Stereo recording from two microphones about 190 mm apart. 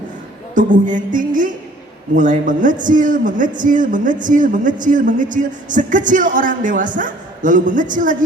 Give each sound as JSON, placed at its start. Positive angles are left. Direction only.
{"t": 0.5, "sound": "a man's voice", "side_deg": -40}